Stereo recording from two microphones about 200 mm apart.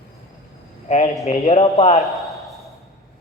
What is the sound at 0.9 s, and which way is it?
A man's voice, 30° left (ahead or behind).